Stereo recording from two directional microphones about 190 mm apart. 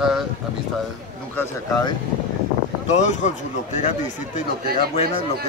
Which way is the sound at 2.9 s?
40° left (ahead or behind).